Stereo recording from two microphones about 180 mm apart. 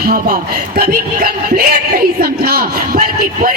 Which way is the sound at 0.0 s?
55° right (ahead or behind).